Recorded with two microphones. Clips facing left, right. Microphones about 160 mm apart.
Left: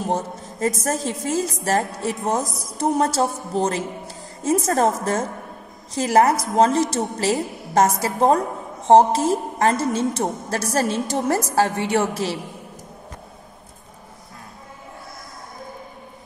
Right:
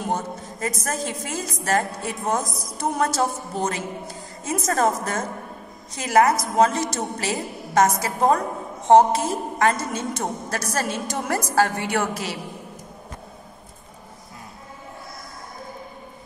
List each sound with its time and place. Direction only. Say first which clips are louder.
0.0 s a woman's voice: left 2 dB; 30° left (ahead or behind)